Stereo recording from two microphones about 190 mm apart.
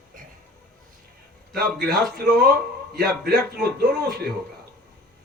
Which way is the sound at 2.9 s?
55° right (ahead or behind).